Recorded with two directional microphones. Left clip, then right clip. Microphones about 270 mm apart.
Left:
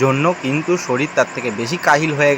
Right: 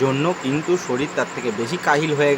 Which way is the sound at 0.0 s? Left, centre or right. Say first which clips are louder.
Left 4 dB; centre.